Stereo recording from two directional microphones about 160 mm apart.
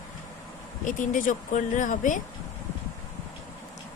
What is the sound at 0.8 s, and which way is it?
A woman's voice, 55° left (ahead or behind).